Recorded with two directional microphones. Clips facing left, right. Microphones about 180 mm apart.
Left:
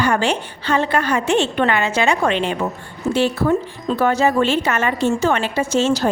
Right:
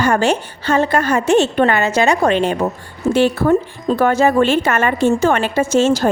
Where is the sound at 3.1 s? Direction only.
55° right (ahead or behind).